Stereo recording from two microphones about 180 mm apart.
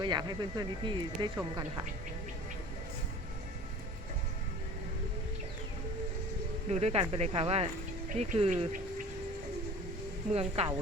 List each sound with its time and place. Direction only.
0.0 s speech: 25° right (ahead or behind)
6.7 s speech: 40° right (ahead or behind)
10.3 s speech: 35° right (ahead or behind)